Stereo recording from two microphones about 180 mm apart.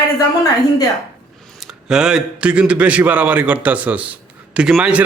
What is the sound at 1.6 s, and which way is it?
A man's voice, 5° right (ahead or behind).